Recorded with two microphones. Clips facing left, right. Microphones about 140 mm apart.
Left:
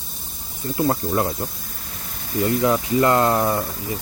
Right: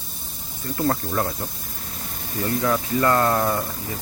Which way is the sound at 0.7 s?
15° left (ahead or behind).